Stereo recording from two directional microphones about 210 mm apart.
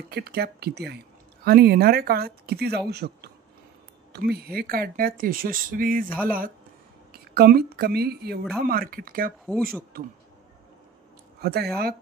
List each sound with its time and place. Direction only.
0.1 s a woman's voice: 50° right (ahead or behind)
11.4 s speech: 50° right (ahead or behind)